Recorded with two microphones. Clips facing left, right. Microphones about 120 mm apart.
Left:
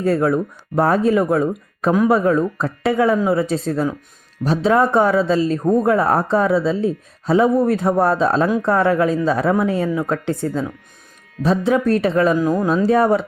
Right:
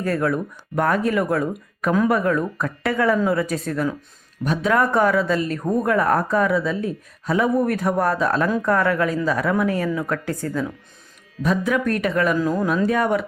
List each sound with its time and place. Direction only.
0.0 s speech: 25° left (ahead or behind)
12.4 s speech: 15° left (ahead or behind)
12.6 s speech: 30° left (ahead or behind)